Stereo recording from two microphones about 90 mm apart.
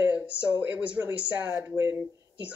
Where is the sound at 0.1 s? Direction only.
15° right (ahead or behind).